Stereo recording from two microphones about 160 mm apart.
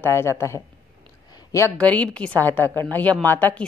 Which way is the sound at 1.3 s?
20° left (ahead or behind).